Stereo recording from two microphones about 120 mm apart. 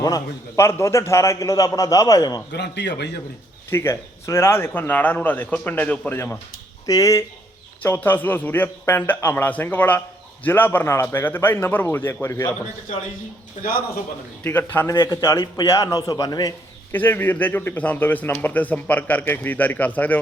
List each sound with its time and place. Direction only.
0.0 s a man's voice: 25° left (ahead or behind)
3.7 s a man's voice: 20° left (ahead or behind)
14.4 s a man's voice: 15° left (ahead or behind); by 16.6 s 35° left (ahead or behind)
16.9 s a man's voice: 15° left (ahead or behind)